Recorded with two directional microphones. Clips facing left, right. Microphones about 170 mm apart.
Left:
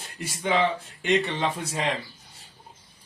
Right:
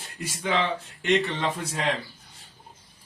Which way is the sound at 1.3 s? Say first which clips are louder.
Left 1 dB; 25° left (ahead or behind).